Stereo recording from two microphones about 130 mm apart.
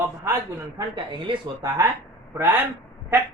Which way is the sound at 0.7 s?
40° right (ahead or behind).